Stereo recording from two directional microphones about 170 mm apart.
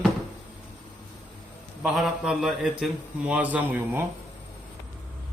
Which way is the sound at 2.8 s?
10° right (ahead or behind).